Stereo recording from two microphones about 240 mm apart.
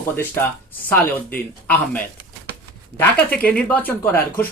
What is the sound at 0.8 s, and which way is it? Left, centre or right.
Speech, centre.